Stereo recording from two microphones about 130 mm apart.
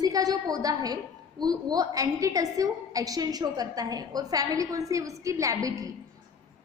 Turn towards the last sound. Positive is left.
turn(degrees=-25)  # may be behind; listen again after turning